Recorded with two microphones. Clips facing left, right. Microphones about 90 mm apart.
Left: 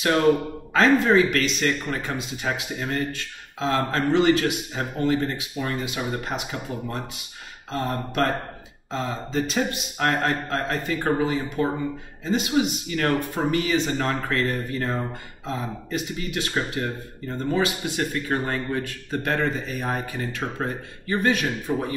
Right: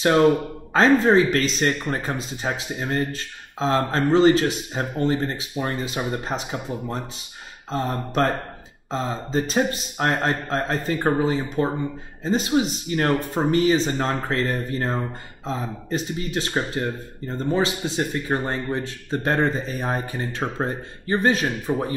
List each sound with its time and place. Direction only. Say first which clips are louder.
0.0 s speech: right 2 dB; 30° right (ahead or behind)
7.7 s speech: right 2 dB; 35° right (ahead or behind)